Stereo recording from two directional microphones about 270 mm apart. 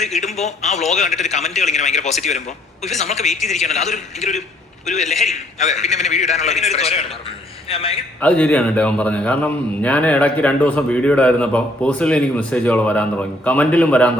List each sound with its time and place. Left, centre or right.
0.0 s a man's voice: left
8.2 s a man's voice: centre